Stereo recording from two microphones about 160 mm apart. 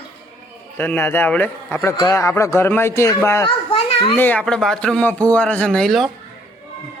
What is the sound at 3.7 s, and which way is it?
Children playing, 40° left (ahead or behind).